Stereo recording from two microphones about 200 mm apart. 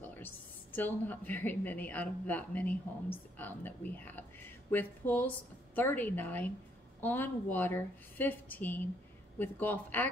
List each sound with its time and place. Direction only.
0.0 s a woman's voice: 10° left (ahead or behind)